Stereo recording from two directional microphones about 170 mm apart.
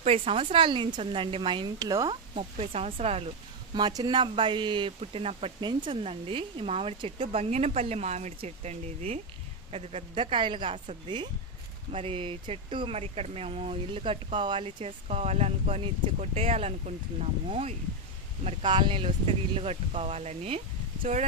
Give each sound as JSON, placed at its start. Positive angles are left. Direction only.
{"t": 0.0, "sound": "a woman's voice", "side_deg": -35}
{"t": 2.3, "sound": "speech", "side_deg": -35}
{"t": 3.8, "sound": "a woman's voice", "side_deg": -25}